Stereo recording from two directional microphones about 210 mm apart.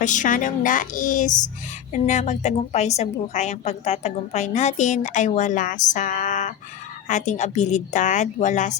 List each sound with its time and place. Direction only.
0.0 s a woman's voice: 35° left (ahead or behind)